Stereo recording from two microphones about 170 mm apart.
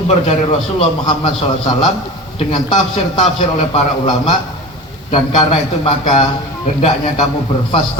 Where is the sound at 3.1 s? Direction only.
35° left (ahead or behind).